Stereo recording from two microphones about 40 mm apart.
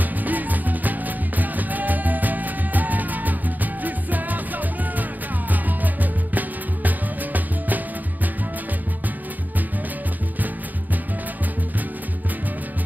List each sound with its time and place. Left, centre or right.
0.0 s music: right